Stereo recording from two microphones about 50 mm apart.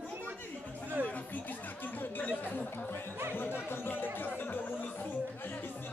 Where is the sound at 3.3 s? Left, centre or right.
Left.